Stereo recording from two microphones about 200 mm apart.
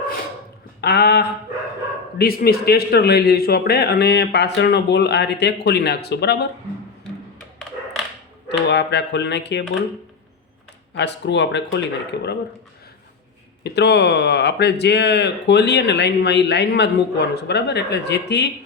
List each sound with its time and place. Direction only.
0.8 s speech: 55° left (ahead or behind)
8.4 s speech: 60° left (ahead or behind)
10.9 s speech: 60° left (ahead or behind)
13.7 s speech: 55° left (ahead or behind)